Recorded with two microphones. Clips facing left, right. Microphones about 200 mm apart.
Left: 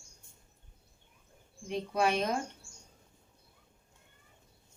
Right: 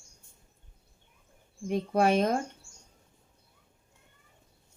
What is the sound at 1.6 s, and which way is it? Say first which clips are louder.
Speech: right 5 dB; 50° right (ahead or behind).